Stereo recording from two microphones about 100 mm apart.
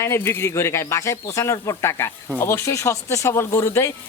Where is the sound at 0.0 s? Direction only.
25° left (ahead or behind).